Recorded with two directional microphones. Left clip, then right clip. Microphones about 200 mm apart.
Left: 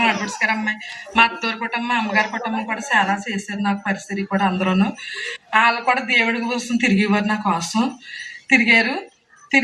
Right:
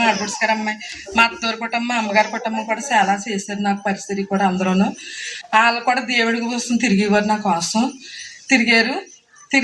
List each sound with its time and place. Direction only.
0.0 s speech: 35° right (ahead or behind)